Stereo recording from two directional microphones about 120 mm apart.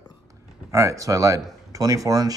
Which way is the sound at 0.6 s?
25° right (ahead or behind).